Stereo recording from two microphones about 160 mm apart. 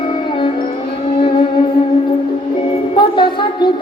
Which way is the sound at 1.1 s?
30° left (ahead or behind).